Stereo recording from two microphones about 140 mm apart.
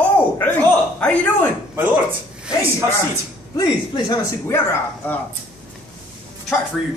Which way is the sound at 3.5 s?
30° left (ahead or behind).